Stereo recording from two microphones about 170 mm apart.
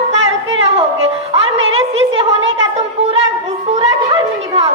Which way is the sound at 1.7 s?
35° right (ahead or behind).